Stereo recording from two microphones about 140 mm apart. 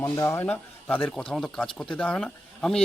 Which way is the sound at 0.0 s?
20° left (ahead or behind).